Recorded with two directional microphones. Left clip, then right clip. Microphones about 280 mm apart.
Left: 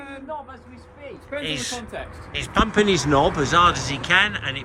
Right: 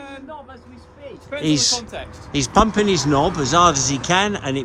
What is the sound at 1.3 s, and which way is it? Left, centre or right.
Speech, centre.